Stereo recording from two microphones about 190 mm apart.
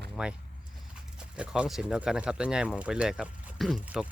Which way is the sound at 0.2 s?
5° right (ahead or behind).